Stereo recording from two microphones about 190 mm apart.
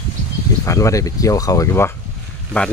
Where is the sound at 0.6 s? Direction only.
15° left (ahead or behind).